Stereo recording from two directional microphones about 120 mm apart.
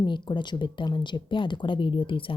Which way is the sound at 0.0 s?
40° left (ahead or behind).